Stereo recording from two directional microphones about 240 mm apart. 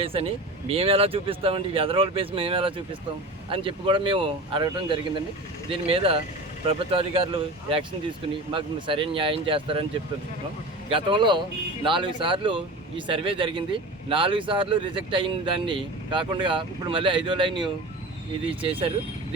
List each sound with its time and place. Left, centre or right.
0.0 s speech: right
8.5 s speech: right
10.8 s speech: right